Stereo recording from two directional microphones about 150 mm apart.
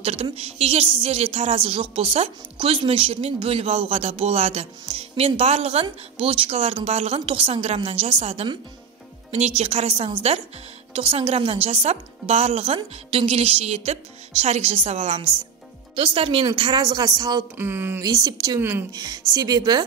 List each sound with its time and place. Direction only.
0.0 s a woman's voice: 40° right (ahead or behind)
9.6 s a woman's voice: 40° right (ahead or behind); by 17.5 s 25° right (ahead or behind)
17.6 s a woman's voice: 15° right (ahead or behind)
18.9 s a woman's voice: 25° right (ahead or behind)